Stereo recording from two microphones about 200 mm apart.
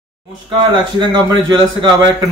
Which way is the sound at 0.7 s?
20° right (ahead or behind).